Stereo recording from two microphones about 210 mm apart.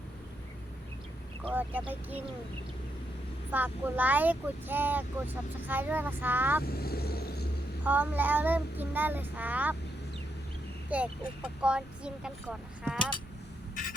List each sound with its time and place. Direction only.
1.5 s speech: 10° right (ahead or behind)
3.5 s speech: 10° right (ahead or behind)
6.7 s vehicle: 45° left (ahead or behind)
7.9 s speech: 10° right (ahead or behind)
10.8 s speech: 5° right (ahead or behind)